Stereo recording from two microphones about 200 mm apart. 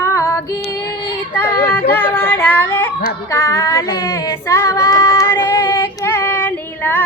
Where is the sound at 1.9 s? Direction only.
10° left (ahead or behind).